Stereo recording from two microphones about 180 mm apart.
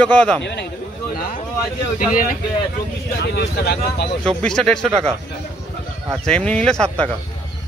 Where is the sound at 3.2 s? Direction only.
65° left (ahead or behind).